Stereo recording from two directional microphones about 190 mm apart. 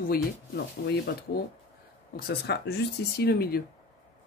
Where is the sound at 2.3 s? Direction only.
60° left (ahead or behind).